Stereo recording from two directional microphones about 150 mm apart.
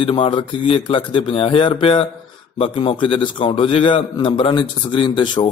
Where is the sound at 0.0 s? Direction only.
35° left (ahead or behind).